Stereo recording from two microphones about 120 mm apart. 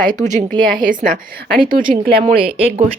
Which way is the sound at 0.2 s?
90° right.